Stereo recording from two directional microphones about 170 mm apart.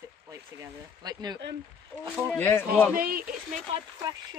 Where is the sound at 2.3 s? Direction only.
10° left (ahead or behind).